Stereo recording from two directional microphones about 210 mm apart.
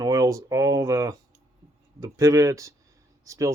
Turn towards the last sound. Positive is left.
turn(degrees=-15)  # may be behind; listen again after turning